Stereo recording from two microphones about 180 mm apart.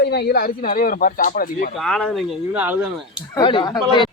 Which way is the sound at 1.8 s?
Centre (ahead or behind).